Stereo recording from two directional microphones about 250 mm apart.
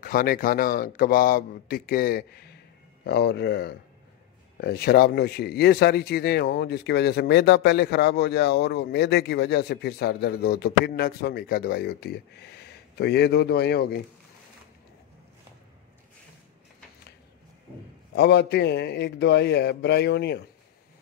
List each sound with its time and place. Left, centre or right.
0.0 s speech: left
18.1 s speech: left